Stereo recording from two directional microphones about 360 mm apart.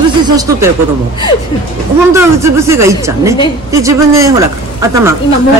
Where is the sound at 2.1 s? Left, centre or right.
Centre.